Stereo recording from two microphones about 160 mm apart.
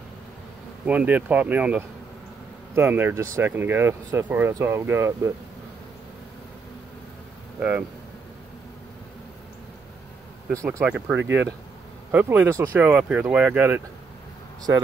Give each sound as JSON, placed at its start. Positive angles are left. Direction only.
{"t": 0.8, "sound": "speech", "side_deg": -10}
{"t": 10.5, "sound": "speech", "side_deg": -20}